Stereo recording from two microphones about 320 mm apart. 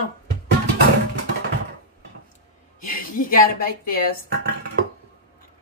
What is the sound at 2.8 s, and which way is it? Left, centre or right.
Speech, left.